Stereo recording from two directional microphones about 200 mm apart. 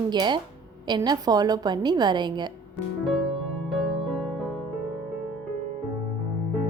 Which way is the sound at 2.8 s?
Centre (ahead or behind).